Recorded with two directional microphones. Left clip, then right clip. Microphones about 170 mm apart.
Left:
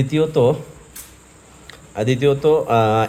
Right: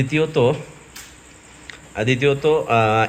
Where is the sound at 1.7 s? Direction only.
25° left (ahead or behind).